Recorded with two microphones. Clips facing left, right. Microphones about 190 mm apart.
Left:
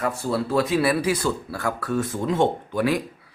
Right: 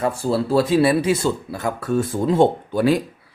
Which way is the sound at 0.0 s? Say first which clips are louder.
Right 4 dB; 30° right (ahead or behind).